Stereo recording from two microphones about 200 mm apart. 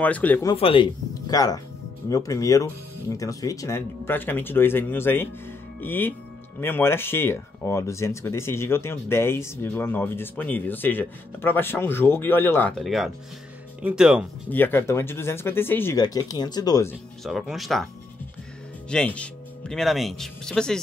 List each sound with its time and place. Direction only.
0.0 s speech: 10° left (ahead or behind)
0.5 s speech: 25° left (ahead or behind); by 14.2 s 5° right (ahead or behind)
14.5 s speech: 10° left (ahead or behind)
17.2 s speech: centre (ahead or behind)
18.9 s speech: 5° left (ahead or behind)